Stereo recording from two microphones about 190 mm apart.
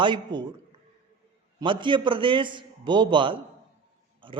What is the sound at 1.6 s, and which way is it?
A man's voice, 25° right (ahead or behind).